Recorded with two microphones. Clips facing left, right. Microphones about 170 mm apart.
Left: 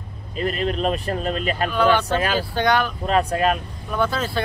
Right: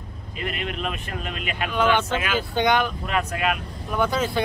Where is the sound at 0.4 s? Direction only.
35° left (ahead or behind).